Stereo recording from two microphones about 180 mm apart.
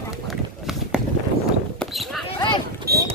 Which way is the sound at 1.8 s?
Centre (ahead or behind).